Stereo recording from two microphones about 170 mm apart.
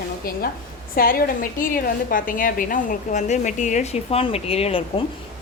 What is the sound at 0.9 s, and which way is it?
A woman's voice, 55° left (ahead or behind).